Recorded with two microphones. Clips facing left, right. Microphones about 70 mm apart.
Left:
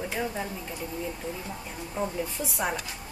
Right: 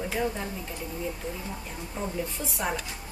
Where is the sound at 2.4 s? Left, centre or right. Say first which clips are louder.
Left 1 dB; centre.